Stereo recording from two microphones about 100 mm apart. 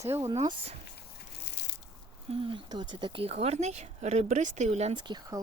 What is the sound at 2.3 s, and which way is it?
Speech, 60° right (ahead or behind).